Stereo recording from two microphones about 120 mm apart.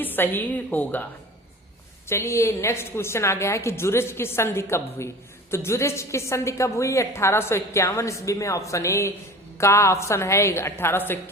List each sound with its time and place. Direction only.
0.0 s a woman's voice: 15° left (ahead or behind)
2.0 s a woman's voice: 20° left (ahead or behind)